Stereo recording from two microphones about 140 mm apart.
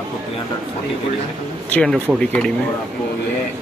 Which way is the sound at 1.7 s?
5° left (ahead or behind).